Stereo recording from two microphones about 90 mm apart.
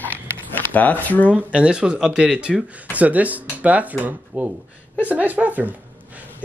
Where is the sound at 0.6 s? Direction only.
20° left (ahead or behind).